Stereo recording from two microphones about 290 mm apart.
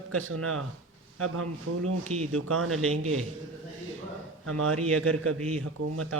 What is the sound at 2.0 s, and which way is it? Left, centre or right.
Speech, right.